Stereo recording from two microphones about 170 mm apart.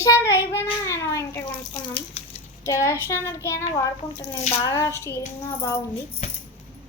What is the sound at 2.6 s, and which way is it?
A child's voice, 15° left (ahead or behind).